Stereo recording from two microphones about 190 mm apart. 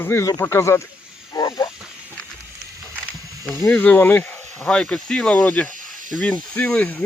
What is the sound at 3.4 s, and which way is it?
Speech, 10° left (ahead or behind).